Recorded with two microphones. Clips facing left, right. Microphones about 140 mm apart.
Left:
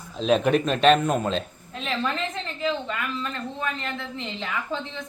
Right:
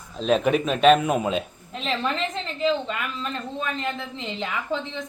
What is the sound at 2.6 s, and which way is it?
Speech, 20° right (ahead or behind).